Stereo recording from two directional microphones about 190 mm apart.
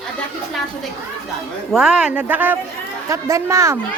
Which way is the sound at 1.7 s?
5° right (ahead or behind).